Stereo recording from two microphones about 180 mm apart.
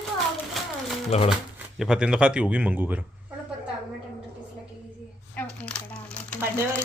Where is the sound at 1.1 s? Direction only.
35° left (ahead or behind).